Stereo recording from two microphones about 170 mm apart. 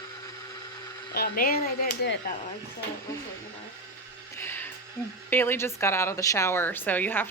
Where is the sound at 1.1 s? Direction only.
60° left (ahead or behind).